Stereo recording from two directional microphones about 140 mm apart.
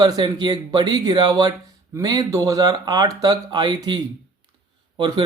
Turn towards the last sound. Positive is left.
turn(degrees=-35)  # may be behind; listen again after turning